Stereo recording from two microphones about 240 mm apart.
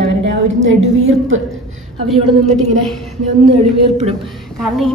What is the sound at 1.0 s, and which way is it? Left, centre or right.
Speech, right.